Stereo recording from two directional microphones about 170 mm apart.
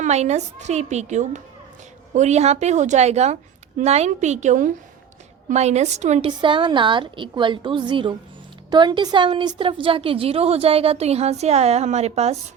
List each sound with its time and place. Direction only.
0.0 s a woman's voice: 40° right (ahead or behind)